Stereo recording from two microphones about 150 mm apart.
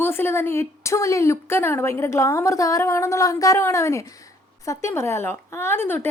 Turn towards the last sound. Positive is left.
turn(degrees=15)  # may be behind; listen again after turning